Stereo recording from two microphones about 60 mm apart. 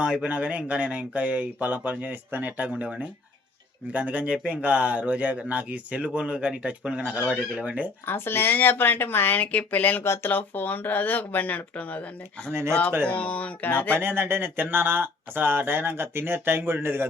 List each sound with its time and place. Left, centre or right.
0.0 s speech: centre
3.9 s speech: right
8.0 s speech: left
9.4 s speech: left
12.5 s speech: right
13.1 s speech: left
13.9 s speech: right